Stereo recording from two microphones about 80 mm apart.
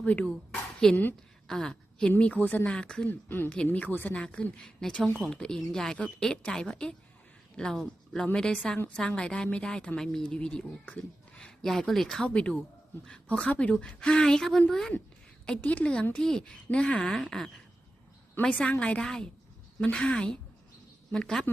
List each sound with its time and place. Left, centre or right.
0.0 s a woman's voice: centre
0.8 s speech: centre
3.2 s a woman's voice: left; by 14.9 s centre
15.4 s speech: centre